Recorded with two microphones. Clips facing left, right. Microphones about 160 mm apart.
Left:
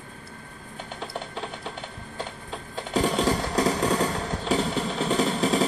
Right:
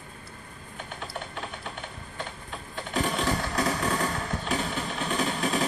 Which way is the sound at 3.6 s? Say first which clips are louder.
Left 6 dB; 30° left (ahead or behind).